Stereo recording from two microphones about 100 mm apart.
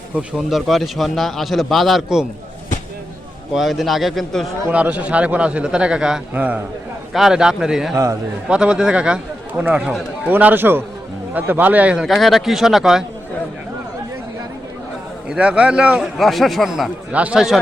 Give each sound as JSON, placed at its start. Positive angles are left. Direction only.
{"t": 0.2, "sound": "speech", "side_deg": 0}
{"t": 3.5, "sound": "speech", "side_deg": 0}
{"t": 4.7, "sound": "a man's voice", "side_deg": -15}
{"t": 7.1, "sound": "speech", "side_deg": -5}
{"t": 7.9, "sound": "a man's voice", "side_deg": -30}
{"t": 8.4, "sound": "a man's voice", "side_deg": -10}
{"t": 12.0, "sound": "speech", "side_deg": 0}
{"t": 15.3, "sound": "a man's voice", "side_deg": -10}
{"t": 16.1, "sound": "speech", "side_deg": 0}
{"t": 17.1, "sound": "a man's voice", "side_deg": -15}